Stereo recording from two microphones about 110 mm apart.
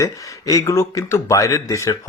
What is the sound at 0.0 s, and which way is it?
Speech, 30° left (ahead or behind).